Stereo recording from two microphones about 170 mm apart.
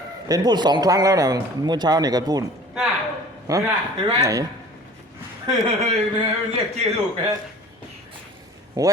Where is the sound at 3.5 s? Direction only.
20° right (ahead or behind).